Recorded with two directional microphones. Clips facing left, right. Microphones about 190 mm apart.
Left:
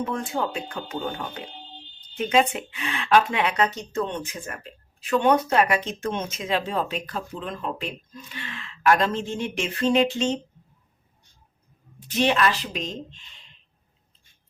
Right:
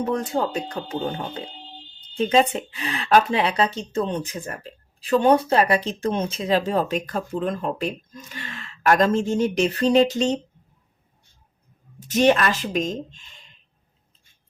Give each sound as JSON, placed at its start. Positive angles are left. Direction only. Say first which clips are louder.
{"t": 0.0, "sound": "speech", "louder": "right 4 dB", "side_deg": -40}
{"t": 11.9, "sound": "speech", "louder": "right 4 dB", "side_deg": -45}